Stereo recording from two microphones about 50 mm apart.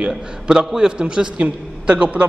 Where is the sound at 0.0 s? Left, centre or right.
Centre.